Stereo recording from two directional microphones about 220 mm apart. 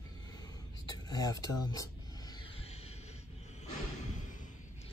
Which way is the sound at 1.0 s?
15° left (ahead or behind).